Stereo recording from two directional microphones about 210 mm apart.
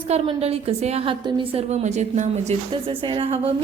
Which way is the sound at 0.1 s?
30° right (ahead or behind).